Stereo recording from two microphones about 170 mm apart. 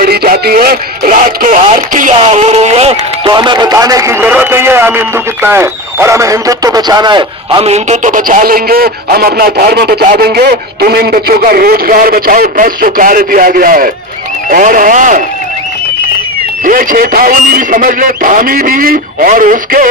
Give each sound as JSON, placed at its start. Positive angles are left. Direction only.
{"t": 0.0, "sound": "speech", "side_deg": -60}
{"t": 16.6, "sound": "speech", "side_deg": -55}